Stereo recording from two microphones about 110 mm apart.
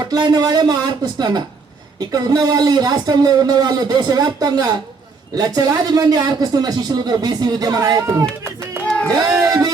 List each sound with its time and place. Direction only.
0.1 s a man's voice: 35° right (ahead or behind)
8.8 s music: 10° left (ahead or behind)
9.4 s a sound: 30° right (ahead or behind)